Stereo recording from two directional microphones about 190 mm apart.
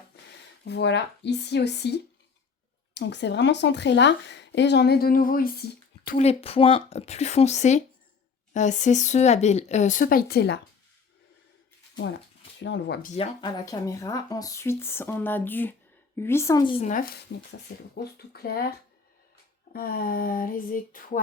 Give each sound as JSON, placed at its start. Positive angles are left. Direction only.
{"t": 0.1, "sound": "a sound", "side_deg": 60}
{"t": 0.6, "sound": "speech", "side_deg": 65}
{"t": 6.1, "sound": "speech", "side_deg": 30}
{"t": 12.6, "sound": "speech", "side_deg": 70}
{"t": 13.0, "sound": "speech", "side_deg": 40}
{"t": 13.4, "sound": "speech", "side_deg": 20}
{"t": 17.9, "sound": "speech", "side_deg": 55}
{"t": 19.7, "sound": "speech", "side_deg": 50}